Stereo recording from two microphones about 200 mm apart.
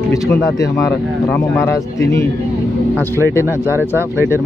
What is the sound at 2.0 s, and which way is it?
Speech, 15° left (ahead or behind).